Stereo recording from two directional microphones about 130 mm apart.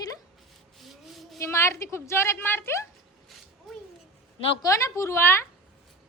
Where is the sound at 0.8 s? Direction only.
Centre (ahead or behind).